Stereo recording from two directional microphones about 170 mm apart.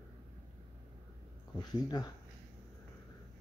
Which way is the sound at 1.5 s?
25° left (ahead or behind).